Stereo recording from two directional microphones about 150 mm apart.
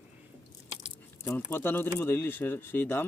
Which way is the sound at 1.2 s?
15° left (ahead or behind).